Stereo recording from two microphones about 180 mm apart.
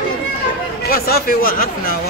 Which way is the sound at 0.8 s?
55° left (ahead or behind).